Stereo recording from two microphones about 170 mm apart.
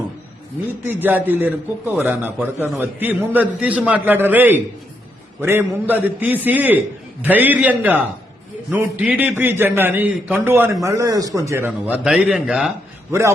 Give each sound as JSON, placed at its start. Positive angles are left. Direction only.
{"t": 0.9, "sound": "a man's voice", "side_deg": -10}
{"t": 13.1, "sound": "a man's voice", "side_deg": -15}